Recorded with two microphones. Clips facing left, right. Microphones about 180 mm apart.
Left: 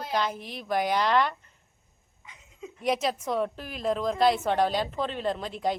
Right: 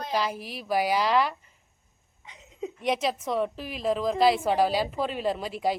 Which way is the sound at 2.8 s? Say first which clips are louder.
Even; centre (ahead or behind).